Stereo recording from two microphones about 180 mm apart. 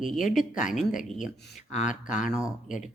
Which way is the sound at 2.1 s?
5° right (ahead or behind).